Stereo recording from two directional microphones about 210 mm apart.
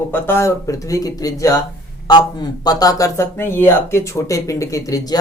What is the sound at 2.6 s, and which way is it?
Speech, 20° left (ahead or behind).